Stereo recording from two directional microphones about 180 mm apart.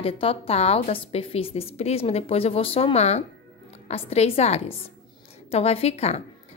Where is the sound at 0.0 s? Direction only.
30° left (ahead or behind).